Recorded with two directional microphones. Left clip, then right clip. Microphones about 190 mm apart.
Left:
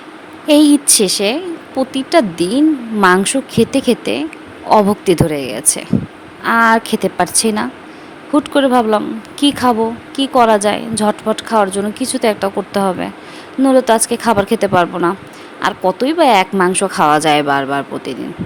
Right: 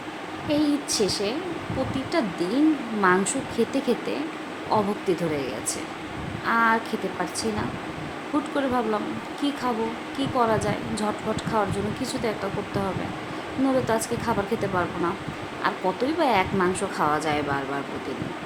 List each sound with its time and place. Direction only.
0.4 s speech: 60° left (ahead or behind)